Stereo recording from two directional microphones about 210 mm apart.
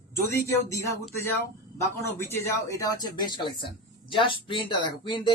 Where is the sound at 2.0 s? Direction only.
10° left (ahead or behind).